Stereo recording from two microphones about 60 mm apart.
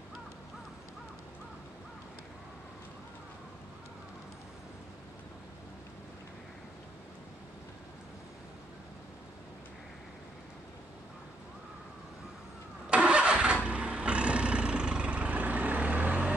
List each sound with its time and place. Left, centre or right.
12.9 s vehicle: centre